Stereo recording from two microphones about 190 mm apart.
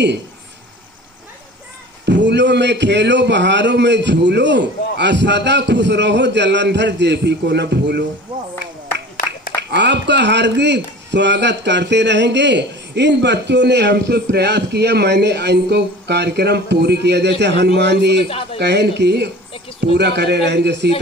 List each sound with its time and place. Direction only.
2.0 s speech: 65° right (ahead or behind)
9.6 s speech: 65° right (ahead or behind)